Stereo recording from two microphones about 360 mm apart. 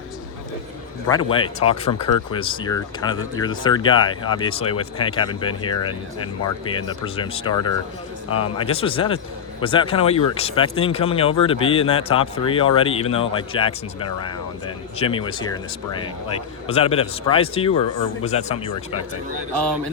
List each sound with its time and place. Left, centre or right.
1.0 s speech: centre
14.9 s speech: centre
16.6 s speech: centre